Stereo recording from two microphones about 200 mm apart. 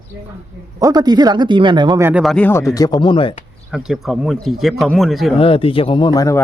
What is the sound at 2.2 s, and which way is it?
Speech, 5° left (ahead or behind).